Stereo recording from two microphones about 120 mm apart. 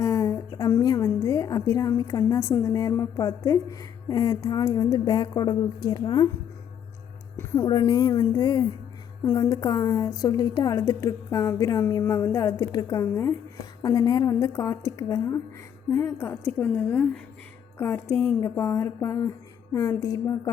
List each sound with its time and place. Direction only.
0.0 s a woman's voice: 25° left (ahead or behind)
7.3 s music: 20° left (ahead or behind)
7.7 s a woman's voice: 35° left (ahead or behind)